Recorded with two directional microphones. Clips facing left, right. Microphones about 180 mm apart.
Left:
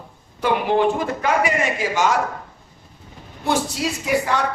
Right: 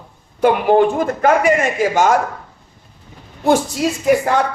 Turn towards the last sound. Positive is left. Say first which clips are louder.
# right 6 dB
turn(degrees=-50)  # may be behind; listen again after turning